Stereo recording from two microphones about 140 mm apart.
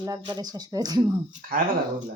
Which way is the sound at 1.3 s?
90° right.